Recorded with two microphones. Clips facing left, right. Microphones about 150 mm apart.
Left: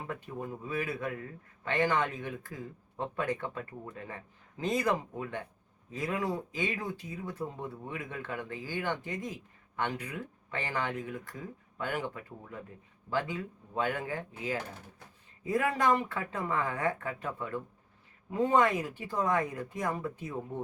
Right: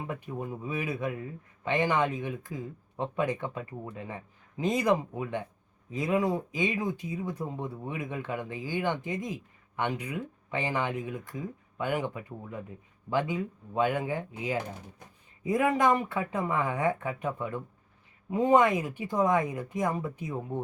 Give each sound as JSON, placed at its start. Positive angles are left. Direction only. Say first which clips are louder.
{"t": 0.1, "sound": "speech", "louder": "right 3 dB", "side_deg": -10}